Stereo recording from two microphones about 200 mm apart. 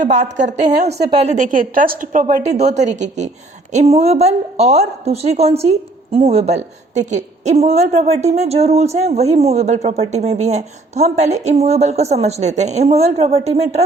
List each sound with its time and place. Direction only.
0.0 s a woman's voice: 35° right (ahead or behind)